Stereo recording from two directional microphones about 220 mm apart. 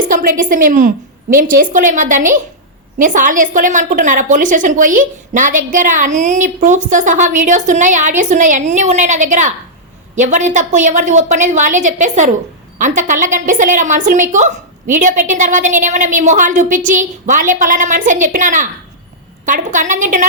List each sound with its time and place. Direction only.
0.0 s a woman's voice: 40° right (ahead or behind)